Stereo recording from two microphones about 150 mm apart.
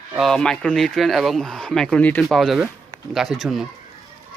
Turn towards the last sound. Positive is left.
turn(degrees=0)  # may be behind; listen again after turning